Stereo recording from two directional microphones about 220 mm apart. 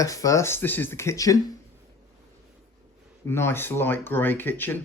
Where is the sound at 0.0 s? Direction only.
15° left (ahead or behind).